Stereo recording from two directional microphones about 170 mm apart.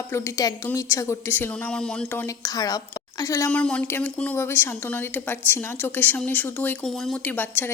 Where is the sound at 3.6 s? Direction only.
5° left (ahead or behind).